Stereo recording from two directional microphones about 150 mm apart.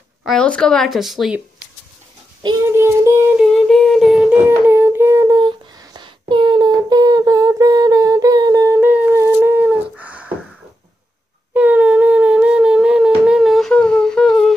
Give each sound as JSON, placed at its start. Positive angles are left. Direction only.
{"t": 0.2, "sound": "speech", "side_deg": 5}
{"t": 2.7, "sound": "child singing", "side_deg": -15}
{"t": 3.3, "sound": "speech", "side_deg": 0}
{"t": 4.5, "sound": "humming", "side_deg": -15}
{"t": 9.3, "sound": "a sound", "side_deg": -15}
{"t": 11.5, "sound": "a sound", "side_deg": -10}